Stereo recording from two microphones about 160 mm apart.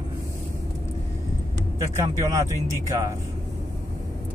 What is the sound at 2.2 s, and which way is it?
Speech, 20° right (ahead or behind).